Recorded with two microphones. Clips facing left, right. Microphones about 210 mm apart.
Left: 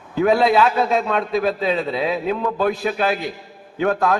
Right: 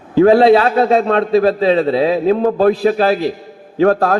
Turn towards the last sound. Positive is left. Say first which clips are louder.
# right 6 dB
turn(degrees=-35)  # may be behind; listen again after turning